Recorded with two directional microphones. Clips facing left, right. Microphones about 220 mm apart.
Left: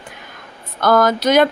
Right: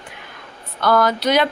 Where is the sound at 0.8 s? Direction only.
45° left (ahead or behind).